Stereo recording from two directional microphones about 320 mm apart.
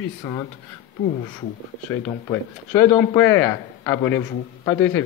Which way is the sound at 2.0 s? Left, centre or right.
Centre.